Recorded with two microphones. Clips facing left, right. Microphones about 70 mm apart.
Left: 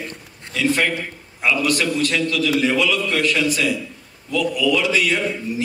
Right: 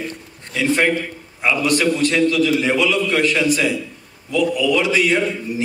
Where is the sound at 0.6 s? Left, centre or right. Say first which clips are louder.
Right 2 dB; right.